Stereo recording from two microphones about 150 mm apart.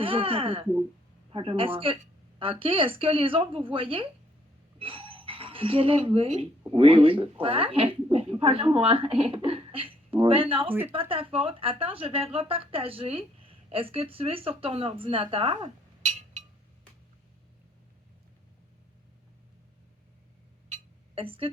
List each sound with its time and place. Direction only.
0.0 s a woman's voice: 35° right (ahead or behind)
10.7 s speech: 15° right (ahead or behind)
11.1 s a woman's voice: 40° right (ahead or behind)
21.2 s a woman's voice: 40° right (ahead or behind)